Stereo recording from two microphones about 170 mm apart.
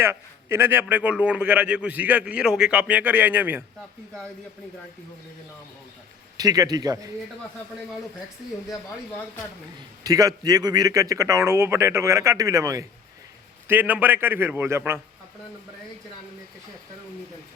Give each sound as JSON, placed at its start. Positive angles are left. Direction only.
{"t": 0.0, "sound": "a man's voice", "side_deg": -15}
{"t": 6.3, "sound": "a man's voice", "side_deg": -20}
{"t": 10.0, "sound": "a man's voice", "side_deg": -20}